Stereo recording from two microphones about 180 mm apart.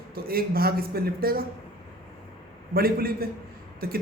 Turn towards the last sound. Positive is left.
turn(degrees=-55)  # may be behind; listen again after turning